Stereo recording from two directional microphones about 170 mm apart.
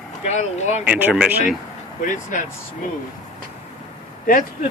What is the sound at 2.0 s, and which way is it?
Speech, 50° left (ahead or behind).